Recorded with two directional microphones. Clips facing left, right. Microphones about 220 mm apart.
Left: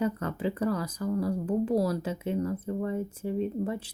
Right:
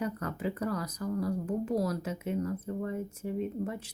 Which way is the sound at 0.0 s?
25° left (ahead or behind).